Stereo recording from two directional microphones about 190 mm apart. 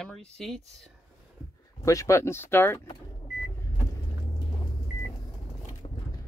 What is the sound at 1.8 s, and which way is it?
Speech, 15° left (ahead or behind).